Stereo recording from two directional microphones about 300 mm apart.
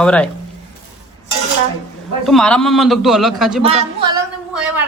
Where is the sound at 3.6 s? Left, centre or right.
Centre.